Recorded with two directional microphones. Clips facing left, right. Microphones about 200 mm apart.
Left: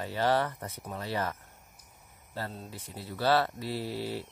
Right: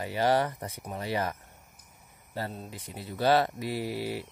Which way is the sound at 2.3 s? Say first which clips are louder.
Right 2 dB; 15° right (ahead or behind).